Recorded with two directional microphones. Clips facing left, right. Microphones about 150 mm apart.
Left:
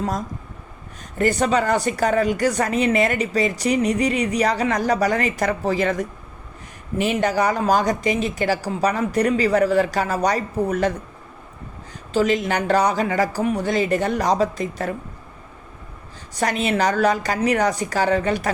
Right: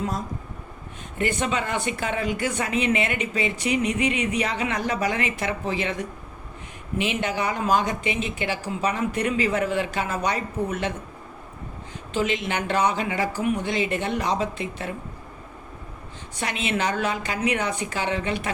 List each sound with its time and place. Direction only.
1.2 s speech: 40° left (ahead or behind)
12.1 s speech: 40° left (ahead or behind)
16.3 s speech: 40° left (ahead or behind)